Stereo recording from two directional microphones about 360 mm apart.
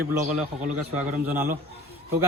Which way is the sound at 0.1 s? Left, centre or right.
Centre.